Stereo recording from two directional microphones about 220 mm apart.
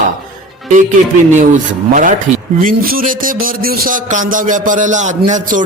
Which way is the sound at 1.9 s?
35° right (ahead or behind).